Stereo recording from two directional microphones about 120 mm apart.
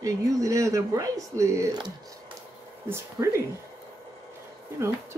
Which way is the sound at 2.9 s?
25° right (ahead or behind).